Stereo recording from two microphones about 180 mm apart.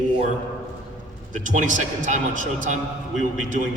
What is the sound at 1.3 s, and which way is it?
A man's voice, 45° right (ahead or behind).